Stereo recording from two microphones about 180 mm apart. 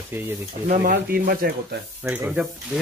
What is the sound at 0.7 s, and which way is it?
Speech, 50° right (ahead or behind).